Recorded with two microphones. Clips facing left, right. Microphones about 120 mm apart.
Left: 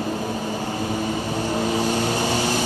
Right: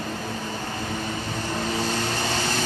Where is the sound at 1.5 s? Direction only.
15° left (ahead or behind).